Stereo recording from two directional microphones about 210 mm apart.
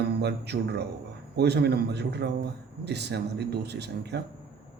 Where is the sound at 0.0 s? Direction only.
50° right (ahead or behind).